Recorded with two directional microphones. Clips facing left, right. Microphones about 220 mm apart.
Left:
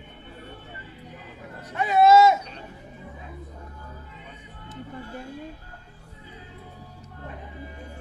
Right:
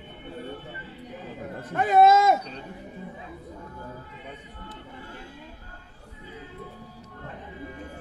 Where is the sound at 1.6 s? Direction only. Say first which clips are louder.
Right 1 dB; 50° right (ahead or behind).